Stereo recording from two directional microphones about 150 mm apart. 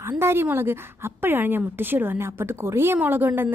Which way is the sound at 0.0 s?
15° right (ahead or behind).